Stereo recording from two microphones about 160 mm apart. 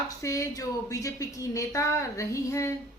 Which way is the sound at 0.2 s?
20° left (ahead or behind).